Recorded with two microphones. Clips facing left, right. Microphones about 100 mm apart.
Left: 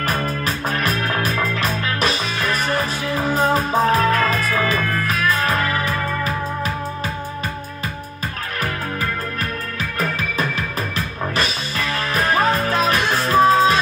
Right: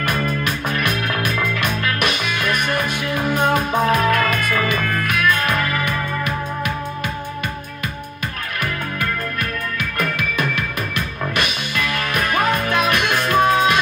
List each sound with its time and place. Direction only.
0.0 s music: 35° left (ahead or behind)
5.4 s music: 35° left (ahead or behind)
9.8 s music: 60° right (ahead or behind)
11.3 s music: 35° left (ahead or behind)